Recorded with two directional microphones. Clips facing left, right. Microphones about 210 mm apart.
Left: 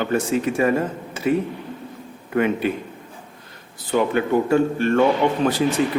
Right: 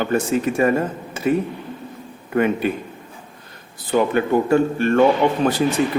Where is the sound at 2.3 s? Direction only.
45° right (ahead or behind).